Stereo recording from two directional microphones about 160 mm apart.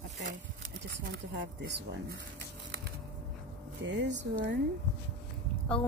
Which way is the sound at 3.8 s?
90° right.